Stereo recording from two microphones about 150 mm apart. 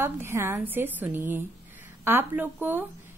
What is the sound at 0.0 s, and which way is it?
A woman's voice, 15° right (ahead or behind).